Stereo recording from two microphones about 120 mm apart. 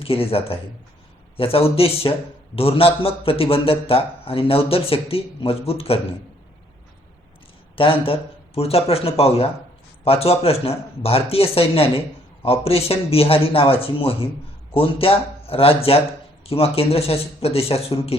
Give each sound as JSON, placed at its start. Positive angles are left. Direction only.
{"t": 0.0, "sound": "a man's voice", "side_deg": 50}
{"t": 7.8, "sound": "a man's voice", "side_deg": 50}